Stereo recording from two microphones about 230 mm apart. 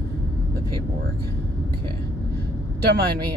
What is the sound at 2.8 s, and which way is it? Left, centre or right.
Speech, right.